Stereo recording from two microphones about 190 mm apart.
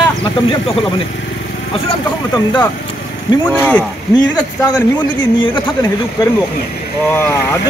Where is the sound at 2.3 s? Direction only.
20° left (ahead or behind).